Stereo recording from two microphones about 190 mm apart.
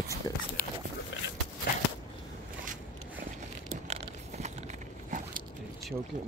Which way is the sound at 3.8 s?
35° right (ahead or behind).